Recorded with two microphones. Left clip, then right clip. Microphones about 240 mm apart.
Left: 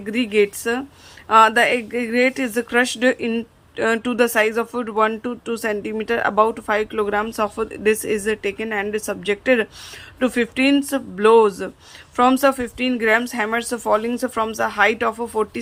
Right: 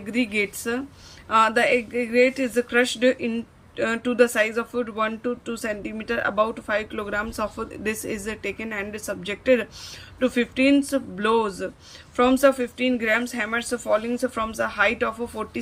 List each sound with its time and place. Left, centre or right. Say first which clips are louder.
0.0 s speech: left 6 dB; centre